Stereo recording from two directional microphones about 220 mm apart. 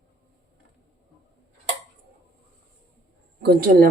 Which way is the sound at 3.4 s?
45° right (ahead or behind).